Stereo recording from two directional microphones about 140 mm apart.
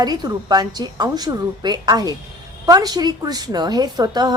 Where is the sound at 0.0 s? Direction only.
30° right (ahead or behind).